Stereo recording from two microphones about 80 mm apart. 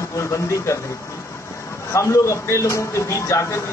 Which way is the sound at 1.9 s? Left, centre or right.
Left.